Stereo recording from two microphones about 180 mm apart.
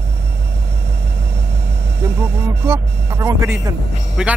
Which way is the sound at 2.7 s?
15° right (ahead or behind).